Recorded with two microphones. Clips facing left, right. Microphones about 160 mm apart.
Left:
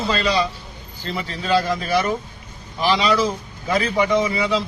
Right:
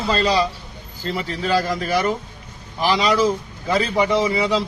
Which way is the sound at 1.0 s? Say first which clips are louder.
Right 3 dB; 40° right (ahead or behind).